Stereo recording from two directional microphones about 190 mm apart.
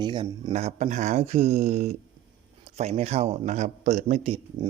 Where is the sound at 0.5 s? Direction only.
35° right (ahead or behind).